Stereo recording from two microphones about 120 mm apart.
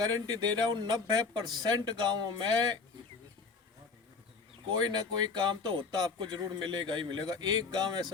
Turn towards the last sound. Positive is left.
turn(degrees=-35)  # may be behind; listen again after turning